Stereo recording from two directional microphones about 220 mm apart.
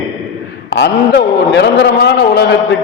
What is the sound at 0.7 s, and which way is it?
A man's voice, 55° left (ahead or behind).